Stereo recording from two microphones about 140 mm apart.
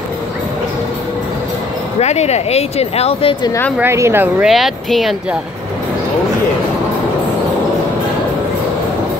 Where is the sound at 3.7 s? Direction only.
15° right (ahead or behind).